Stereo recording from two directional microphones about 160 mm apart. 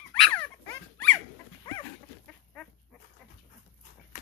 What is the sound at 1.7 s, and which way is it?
Dog, 25° left (ahead or behind).